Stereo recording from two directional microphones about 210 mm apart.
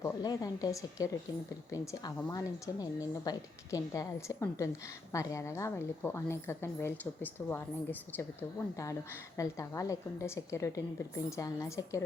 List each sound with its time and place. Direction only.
0.0 s a woman's voice: 20° left (ahead or behind)